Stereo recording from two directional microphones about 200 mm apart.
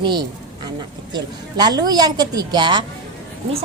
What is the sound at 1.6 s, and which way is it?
A woman's voice, 20° right (ahead or behind).